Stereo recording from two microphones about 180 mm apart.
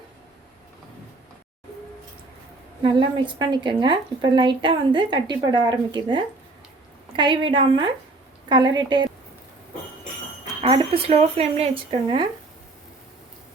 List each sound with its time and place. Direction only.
2.8 s speech: 25° right (ahead or behind)
10.6 s speech: 30° right (ahead or behind)